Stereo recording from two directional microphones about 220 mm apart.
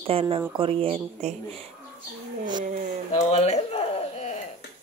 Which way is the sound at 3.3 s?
30° left (ahead or behind).